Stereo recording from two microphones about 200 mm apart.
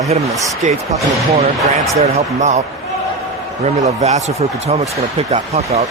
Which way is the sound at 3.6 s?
35° right (ahead or behind).